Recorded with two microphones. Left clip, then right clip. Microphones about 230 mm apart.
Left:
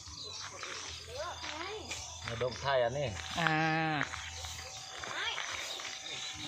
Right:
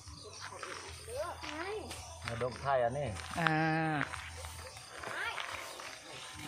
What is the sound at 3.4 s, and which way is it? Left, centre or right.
Speech, centre.